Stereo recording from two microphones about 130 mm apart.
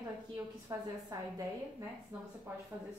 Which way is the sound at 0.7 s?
25° right (ahead or behind).